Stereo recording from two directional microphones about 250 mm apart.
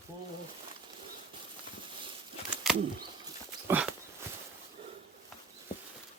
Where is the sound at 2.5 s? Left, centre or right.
Centre.